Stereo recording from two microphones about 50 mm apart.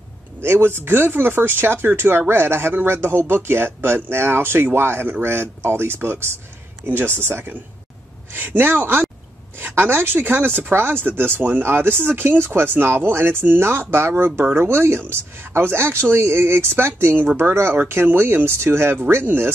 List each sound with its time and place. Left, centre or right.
0.4 s speech: right